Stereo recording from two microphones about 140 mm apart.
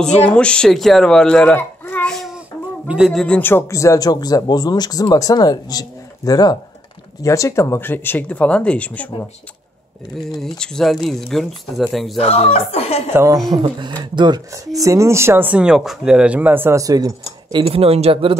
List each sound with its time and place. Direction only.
0.0 s speech: 10° left (ahead or behind)
2.1 s child singing: 5° right (ahead or behind)
3.1 s speech: 5° left (ahead or behind)
10.6 s speech: 5° left (ahead or behind)
12.2 s speech: 50° left (ahead or behind)
13.1 s speech: 20° right (ahead or behind)
13.5 s speech: 35° right (ahead or behind)